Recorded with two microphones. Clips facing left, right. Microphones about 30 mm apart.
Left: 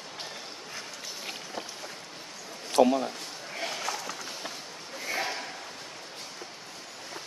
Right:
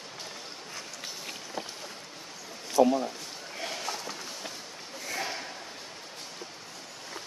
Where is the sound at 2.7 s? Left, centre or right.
Left.